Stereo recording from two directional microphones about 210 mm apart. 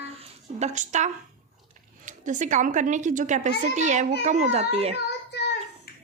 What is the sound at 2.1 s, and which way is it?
A woman's voice, 35° right (ahead or behind).